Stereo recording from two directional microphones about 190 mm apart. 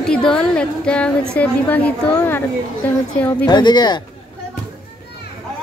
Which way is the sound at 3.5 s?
20° left (ahead or behind).